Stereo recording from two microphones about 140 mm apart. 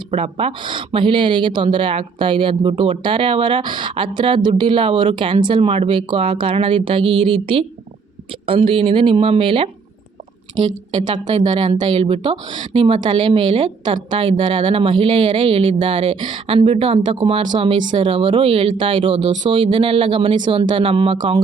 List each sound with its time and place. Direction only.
0.1 s speech: 40° right (ahead or behind)
10.9 s speech: 35° right (ahead or behind)